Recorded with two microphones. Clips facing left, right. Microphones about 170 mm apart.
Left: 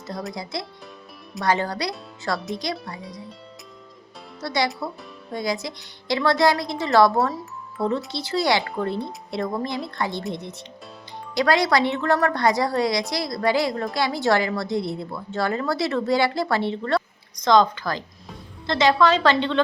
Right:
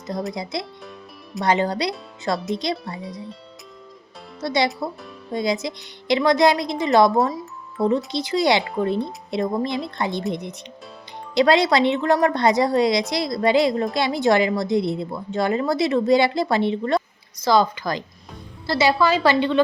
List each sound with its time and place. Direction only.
0.5 s a woman's voice: 20° right (ahead or behind)
3.0 s speech: centre (ahead or behind)
4.4 s a woman's voice: 20° right (ahead or behind)
11.3 s a woman's voice: 20° right (ahead or behind)
17.4 s a woman's voice: 5° right (ahead or behind)